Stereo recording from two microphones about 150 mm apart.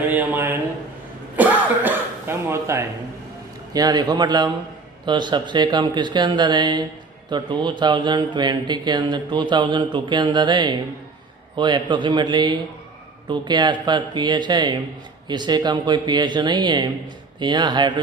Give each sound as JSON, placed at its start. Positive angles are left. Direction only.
{"t": 0.0, "sound": "a man's voice", "side_deg": -10}
{"t": 1.4, "sound": "cough", "side_deg": -10}
{"t": 3.7, "sound": "speech", "side_deg": -25}